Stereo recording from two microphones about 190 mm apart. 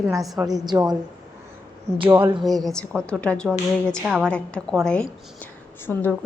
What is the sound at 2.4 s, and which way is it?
A woman's voice, centre (ahead or behind).